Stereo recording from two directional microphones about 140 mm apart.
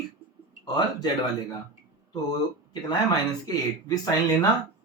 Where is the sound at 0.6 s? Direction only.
25° left (ahead or behind).